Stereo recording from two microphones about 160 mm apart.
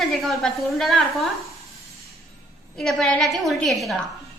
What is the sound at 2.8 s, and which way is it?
A woman's voice, 5° left (ahead or behind).